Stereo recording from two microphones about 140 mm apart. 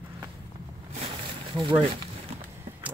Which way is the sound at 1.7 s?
35° right (ahead or behind).